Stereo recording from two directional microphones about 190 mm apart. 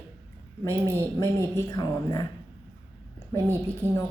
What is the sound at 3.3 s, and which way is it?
Speech, 15° right (ahead or behind).